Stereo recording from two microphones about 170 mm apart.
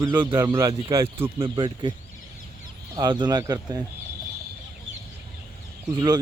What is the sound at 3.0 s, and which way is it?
Speech, 25° right (ahead or behind).